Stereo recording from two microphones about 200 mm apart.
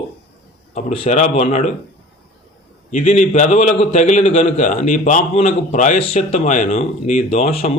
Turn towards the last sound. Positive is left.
turn(degrees=30)  # may be behind; listen again after turning